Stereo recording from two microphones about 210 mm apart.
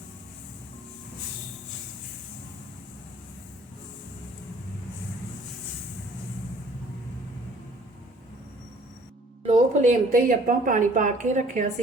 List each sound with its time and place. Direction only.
9.5 s a woman's voice: 35° right (ahead or behind)